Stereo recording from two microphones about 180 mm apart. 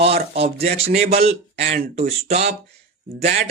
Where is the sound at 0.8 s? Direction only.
35° right (ahead or behind).